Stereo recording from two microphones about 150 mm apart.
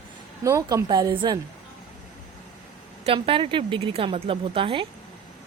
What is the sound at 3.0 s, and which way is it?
A woman's voice, 35° right (ahead or behind).